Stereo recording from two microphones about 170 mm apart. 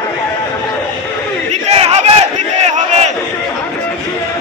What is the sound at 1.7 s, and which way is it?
Battle cry, 35° right (ahead or behind).